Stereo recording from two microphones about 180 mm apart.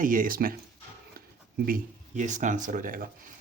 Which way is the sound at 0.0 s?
50° right (ahead or behind).